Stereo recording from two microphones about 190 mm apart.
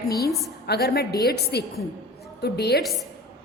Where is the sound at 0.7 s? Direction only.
55° left (ahead or behind).